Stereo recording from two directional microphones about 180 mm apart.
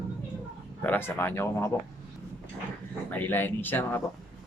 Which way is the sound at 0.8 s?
10° left (ahead or behind).